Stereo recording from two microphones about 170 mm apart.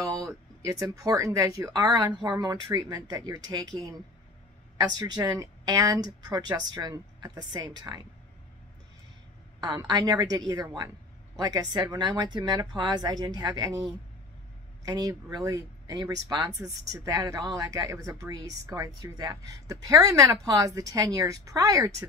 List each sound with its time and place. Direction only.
0.0 s a sound: 20° right (ahead or behind)
0.8 s speech: 20° right (ahead or behind)
9.6 s speech: 25° right (ahead or behind)